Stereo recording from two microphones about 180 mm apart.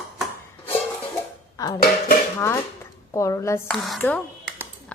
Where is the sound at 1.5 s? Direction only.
20° left (ahead or behind).